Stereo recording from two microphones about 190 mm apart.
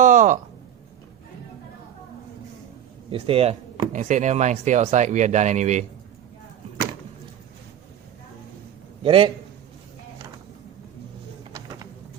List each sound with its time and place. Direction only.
0.0 s a sound: 40° right (ahead or behind)
3.1 s speech: 30° right (ahead or behind)
9.0 s a man's voice: 30° right (ahead or behind)